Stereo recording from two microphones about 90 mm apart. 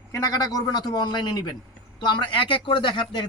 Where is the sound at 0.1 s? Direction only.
45° left (ahead or behind).